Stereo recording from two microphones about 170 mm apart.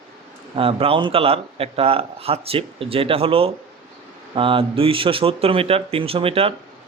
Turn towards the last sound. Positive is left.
turn(degrees=-35)  # may be behind; listen again after turning